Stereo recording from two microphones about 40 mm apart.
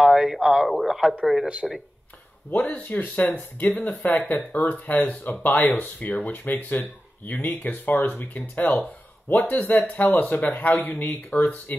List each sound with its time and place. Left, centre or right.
0.3 s speech: centre
2.5 s speech: left